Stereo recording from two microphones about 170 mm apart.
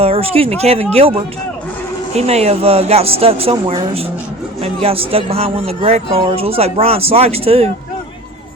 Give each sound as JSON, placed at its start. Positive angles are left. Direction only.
{"t": 0.0, "sound": "speech", "side_deg": -35}
{"t": 4.6, "sound": "speech", "side_deg": -35}